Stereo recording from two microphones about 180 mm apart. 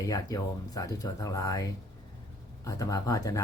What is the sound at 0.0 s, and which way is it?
Speech, 20° left (ahead or behind).